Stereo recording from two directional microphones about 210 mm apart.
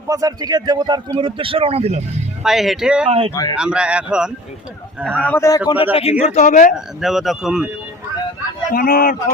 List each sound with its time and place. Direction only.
0.1 s a man's voice: 15° right (ahead or behind)
2.4 s speech: centre (ahead or behind)
3.1 s a man's voice: 25° right (ahead or behind)
3.6 s a man's voice: 5° right (ahead or behind); by 6.7 s 35° left (ahead or behind)
6.7 s speech: centre (ahead or behind)
8.7 s speech: 45° left (ahead or behind)